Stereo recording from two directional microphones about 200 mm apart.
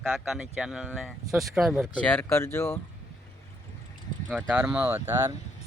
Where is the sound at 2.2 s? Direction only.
10° left (ahead or behind).